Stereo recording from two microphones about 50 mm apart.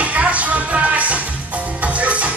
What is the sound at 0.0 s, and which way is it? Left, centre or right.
Music, right.